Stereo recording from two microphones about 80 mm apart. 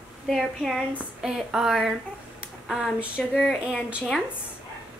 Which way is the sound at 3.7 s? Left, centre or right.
Centre.